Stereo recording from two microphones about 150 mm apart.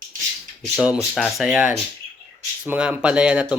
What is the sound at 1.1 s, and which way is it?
Speech, centre (ahead or behind).